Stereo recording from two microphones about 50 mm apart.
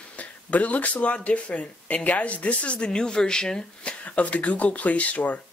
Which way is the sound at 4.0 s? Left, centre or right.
Left.